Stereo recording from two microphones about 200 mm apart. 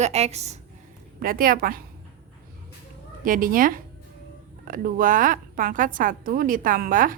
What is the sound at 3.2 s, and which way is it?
A woman's voice, 45° right (ahead or behind).